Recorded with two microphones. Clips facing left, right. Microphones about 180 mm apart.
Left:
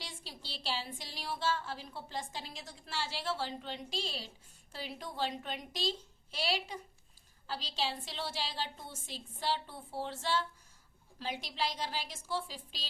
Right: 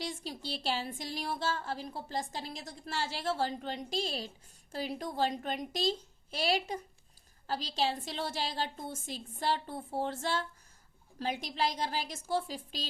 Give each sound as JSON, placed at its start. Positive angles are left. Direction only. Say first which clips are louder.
{"t": 0.0, "sound": "a woman's voice", "louder": "right 10 dB", "side_deg": -45}